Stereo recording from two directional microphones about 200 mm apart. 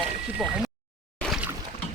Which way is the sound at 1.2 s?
Centre (ahead or behind).